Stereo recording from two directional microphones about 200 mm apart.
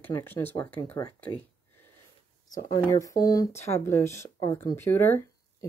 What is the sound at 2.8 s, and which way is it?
Speech, 15° left (ahead or behind).